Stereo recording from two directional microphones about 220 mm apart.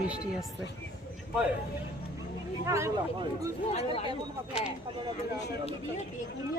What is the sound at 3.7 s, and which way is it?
Speech, 25° left (ahead or behind).